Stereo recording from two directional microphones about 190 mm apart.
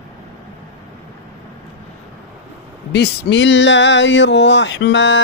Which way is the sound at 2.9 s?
65° left (ahead or behind).